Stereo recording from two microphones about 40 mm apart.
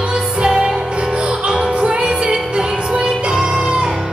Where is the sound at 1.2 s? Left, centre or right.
Right.